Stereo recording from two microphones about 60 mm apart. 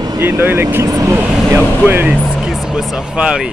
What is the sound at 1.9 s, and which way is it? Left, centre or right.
Speech, right.